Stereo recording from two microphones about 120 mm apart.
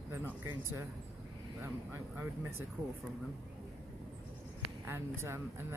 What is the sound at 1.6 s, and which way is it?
Speech, 20° right (ahead or behind).